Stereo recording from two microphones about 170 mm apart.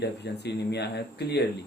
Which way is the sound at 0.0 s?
80° left.